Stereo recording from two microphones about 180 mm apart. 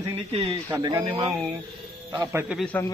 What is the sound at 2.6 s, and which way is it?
Speech, 10° left (ahead or behind).